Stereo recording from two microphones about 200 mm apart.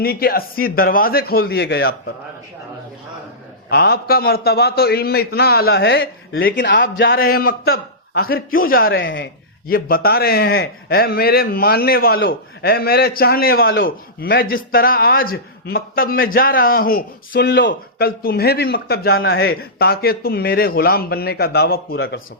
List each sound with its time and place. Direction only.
0.0 s a man's voice: 50° left (ahead or behind)
3.7 s a man's voice: 50° left (ahead or behind)
19.1 s a man's voice: 80° left
19.4 s a man's voice: 50° left (ahead or behind)